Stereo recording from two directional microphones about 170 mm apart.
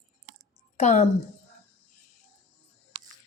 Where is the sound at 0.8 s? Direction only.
40° left (ahead or behind).